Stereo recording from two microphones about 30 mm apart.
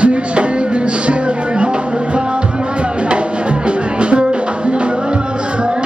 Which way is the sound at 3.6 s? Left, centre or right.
Right.